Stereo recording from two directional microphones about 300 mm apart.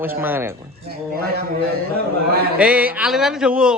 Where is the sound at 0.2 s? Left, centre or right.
Centre.